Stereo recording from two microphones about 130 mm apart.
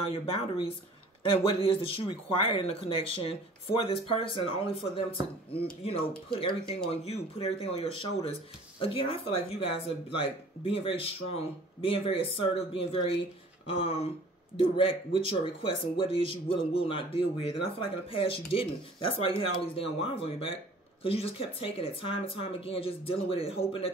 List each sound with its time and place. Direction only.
0.0 s speech: 45° left (ahead or behind)